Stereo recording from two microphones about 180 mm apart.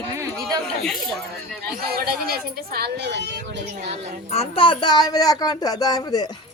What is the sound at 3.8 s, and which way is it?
Speech, 35° right (ahead or behind).